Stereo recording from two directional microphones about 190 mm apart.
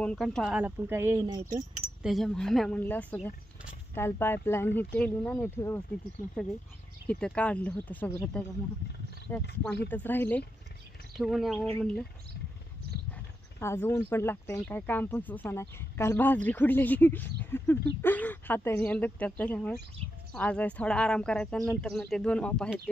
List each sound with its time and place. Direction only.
0.0 s speech: 5° left (ahead or behind); by 1.6 s 20° right (ahead or behind)
2.0 s speech: centre (ahead or behind)
7.1 s speech: 5° left (ahead or behind)
11.1 s speech: centre (ahead or behind)
13.6 s speech: 15° left (ahead or behind)